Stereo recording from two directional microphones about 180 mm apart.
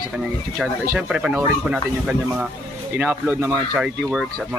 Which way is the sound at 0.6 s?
Centre (ahead or behind).